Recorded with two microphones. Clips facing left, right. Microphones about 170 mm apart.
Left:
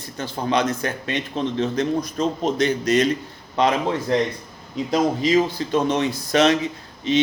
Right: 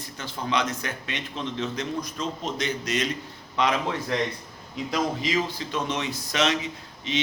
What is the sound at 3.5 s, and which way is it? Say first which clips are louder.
A man's voice: left 5 dB; 30° left (ahead or behind).